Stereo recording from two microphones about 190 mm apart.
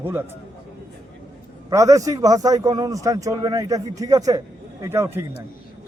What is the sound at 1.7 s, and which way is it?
A man's voice, 15° right (ahead or behind).